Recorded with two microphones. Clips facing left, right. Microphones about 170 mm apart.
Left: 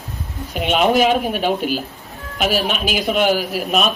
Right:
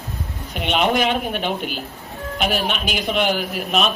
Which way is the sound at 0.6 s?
45° left (ahead or behind).